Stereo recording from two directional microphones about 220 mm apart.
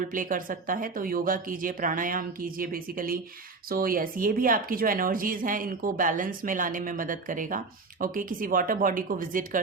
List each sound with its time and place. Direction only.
0.0 s a woman's voice: 35° right (ahead or behind)